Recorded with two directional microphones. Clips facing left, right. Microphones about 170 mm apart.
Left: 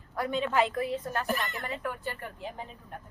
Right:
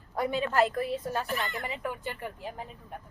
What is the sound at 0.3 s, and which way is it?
A woman's voice, 5° right (ahead or behind).